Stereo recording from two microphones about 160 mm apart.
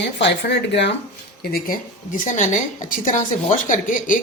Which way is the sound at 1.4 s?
70° left (ahead or behind).